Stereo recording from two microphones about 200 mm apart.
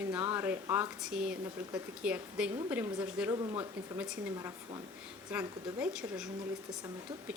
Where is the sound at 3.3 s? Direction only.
20° right (ahead or behind).